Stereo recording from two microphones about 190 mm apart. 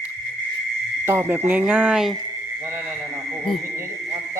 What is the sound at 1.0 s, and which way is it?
A man's voice, 10° right (ahead or behind).